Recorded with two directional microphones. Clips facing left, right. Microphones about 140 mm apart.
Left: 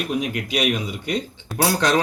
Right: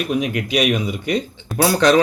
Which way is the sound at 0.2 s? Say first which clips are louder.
Right 4 dB; 90° right.